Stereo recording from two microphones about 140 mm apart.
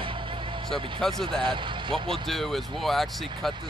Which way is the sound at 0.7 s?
35° right (ahead or behind).